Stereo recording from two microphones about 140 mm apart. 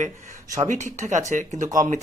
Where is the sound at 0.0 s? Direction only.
60° right (ahead or behind).